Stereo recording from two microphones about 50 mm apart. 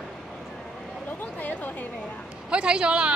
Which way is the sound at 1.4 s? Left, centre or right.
Left.